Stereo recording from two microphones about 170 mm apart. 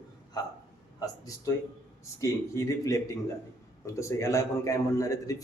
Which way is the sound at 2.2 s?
20° left (ahead or behind).